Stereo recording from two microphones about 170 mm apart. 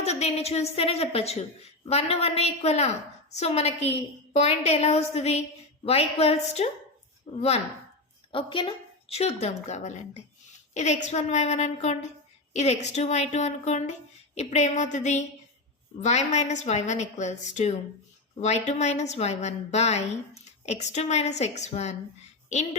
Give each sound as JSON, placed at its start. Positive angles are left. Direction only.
{"t": 0.0, "sound": "a woman's voice", "side_deg": 40}
{"t": 8.3, "sound": "a woman's voice", "side_deg": 30}